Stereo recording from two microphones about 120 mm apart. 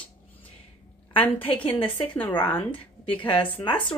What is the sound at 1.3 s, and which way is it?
Speech, 50° left (ahead or behind).